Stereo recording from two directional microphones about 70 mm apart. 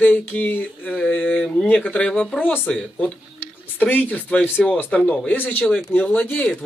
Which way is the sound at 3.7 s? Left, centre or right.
Left.